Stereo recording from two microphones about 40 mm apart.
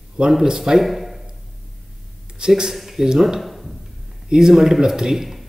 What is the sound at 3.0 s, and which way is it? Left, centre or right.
Speech, centre.